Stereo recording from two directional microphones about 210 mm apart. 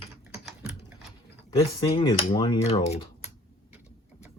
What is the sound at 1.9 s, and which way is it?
Speech, 25° left (ahead or behind).